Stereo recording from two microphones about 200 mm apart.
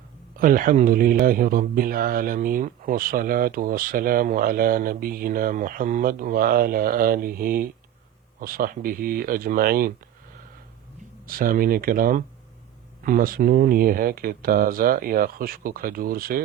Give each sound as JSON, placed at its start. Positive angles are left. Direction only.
{"t": 0.3, "sound": "speech", "side_deg": -45}
{"t": 11.3, "sound": "speech", "side_deg": -45}